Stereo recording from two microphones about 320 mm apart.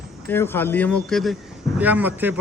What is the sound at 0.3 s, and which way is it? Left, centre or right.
A man's voice, centre.